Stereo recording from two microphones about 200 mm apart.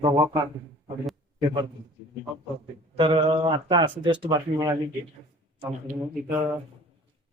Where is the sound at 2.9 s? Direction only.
25° right (ahead or behind).